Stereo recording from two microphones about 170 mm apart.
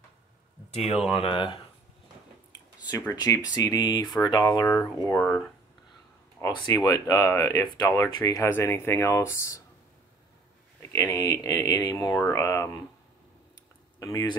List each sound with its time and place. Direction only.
1.1 s speech: 30° left (ahead or behind)
2.9 s speech: 20° left (ahead or behind)
6.5 s speech: 25° left (ahead or behind)
10.8 s speech: 20° left (ahead or behind)
13.9 s speech: 20° left (ahead or behind)